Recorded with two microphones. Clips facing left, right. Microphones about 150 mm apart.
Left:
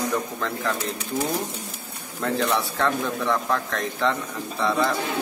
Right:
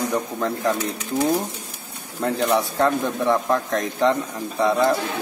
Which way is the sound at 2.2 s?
20° right (ahead or behind).